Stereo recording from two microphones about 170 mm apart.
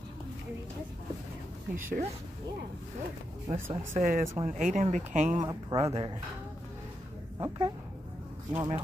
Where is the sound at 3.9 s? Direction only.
55° right (ahead or behind).